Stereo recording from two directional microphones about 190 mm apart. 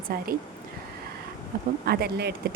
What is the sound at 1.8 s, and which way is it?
Speech, 55° right (ahead or behind).